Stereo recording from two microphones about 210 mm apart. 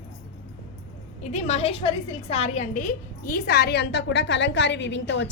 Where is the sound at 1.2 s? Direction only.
35° left (ahead or behind).